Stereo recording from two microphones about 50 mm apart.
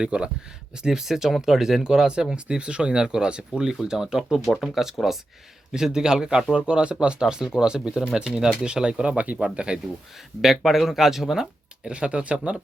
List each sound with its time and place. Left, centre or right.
0.0 s speech: centre
0.8 s speech: centre
10.4 s speech: centre
11.9 s speech: right